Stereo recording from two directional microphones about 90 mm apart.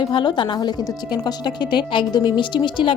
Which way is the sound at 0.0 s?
60° left (ahead or behind).